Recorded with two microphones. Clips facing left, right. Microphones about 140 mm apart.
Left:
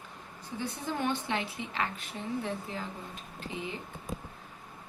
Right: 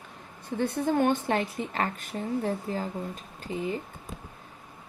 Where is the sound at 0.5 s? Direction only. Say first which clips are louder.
Right 9 dB; 55° right (ahead or behind).